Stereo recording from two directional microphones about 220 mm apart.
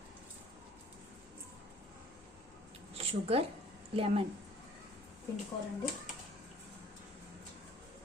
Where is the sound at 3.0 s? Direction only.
25° right (ahead or behind).